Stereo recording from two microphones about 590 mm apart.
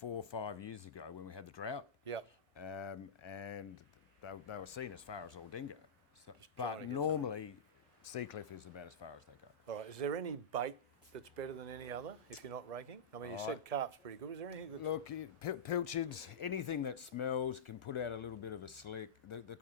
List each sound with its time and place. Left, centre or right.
0.0 s speech: left
8.0 s speech: left
9.6 s speech: right
11.7 s speech: right
14.5 s speech: left